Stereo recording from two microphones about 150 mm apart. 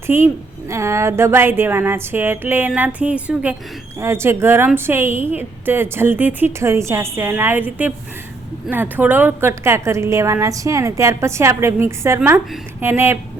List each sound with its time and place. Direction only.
0.7 s a woman's voice: 20° right (ahead or behind)